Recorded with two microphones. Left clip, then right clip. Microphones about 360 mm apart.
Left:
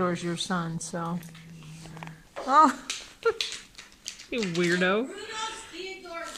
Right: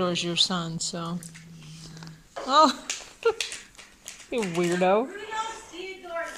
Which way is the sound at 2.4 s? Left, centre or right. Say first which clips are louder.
Even; centre.